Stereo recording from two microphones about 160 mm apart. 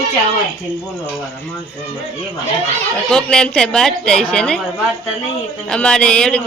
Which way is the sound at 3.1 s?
5° left (ahead or behind).